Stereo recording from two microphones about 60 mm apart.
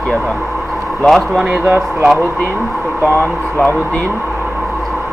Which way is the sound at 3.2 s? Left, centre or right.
Left.